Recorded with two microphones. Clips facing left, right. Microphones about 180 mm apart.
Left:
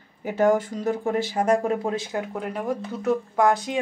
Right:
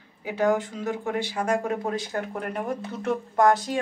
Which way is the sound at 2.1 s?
5° left (ahead or behind).